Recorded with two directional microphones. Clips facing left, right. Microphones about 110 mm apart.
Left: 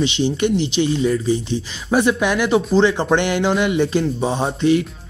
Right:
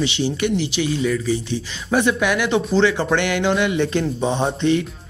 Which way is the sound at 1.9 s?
20° left (ahead or behind).